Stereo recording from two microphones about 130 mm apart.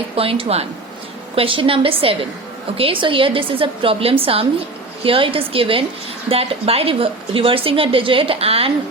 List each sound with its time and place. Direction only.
0.2 s a woman's voice: 45° right (ahead or behind)